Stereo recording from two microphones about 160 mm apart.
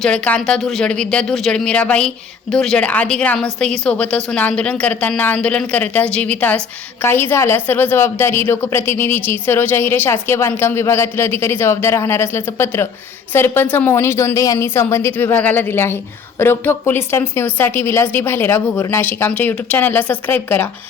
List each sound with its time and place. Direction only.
0.0 s speech: 5° left (ahead or behind)